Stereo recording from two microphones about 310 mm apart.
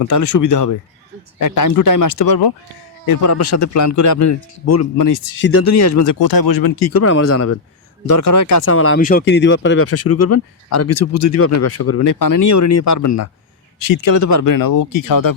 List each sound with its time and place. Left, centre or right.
0.0 s speech: left
3.1 s a man's voice: left
4.9 s speech: left
5.4 s a man's voice: left
8.2 s a man's voice: left
8.7 s speech: left
9.0 s speech: left
12.0 s a man's voice: left
13.8 s speech: left